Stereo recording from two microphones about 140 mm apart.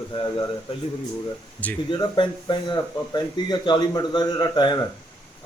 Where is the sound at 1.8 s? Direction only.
35° left (ahead or behind).